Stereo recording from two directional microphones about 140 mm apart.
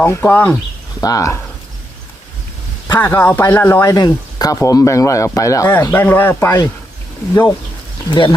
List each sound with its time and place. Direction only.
0.0 s speech: 15° left (ahead or behind)
1.0 s speech: 25° left (ahead or behind)
3.0 s speech: 15° left (ahead or behind)
8.1 s speech: 35° left (ahead or behind)